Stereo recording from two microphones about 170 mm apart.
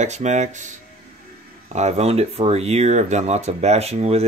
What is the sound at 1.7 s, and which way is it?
Speech, 40° right (ahead or behind).